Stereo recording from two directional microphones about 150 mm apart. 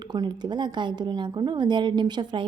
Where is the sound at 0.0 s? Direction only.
30° right (ahead or behind).